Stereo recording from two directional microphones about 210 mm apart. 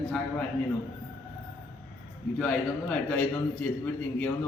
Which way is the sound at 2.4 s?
5° left (ahead or behind).